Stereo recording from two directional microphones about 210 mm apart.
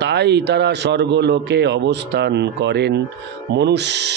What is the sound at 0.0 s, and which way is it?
Speech, 55° right (ahead or behind).